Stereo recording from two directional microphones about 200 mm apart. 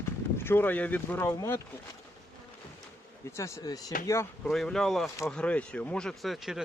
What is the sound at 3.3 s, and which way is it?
Speech, 15° left (ahead or behind).